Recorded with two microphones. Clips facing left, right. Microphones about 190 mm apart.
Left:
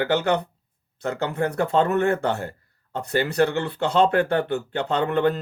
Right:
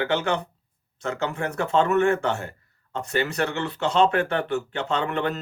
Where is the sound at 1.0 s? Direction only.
35° left (ahead or behind).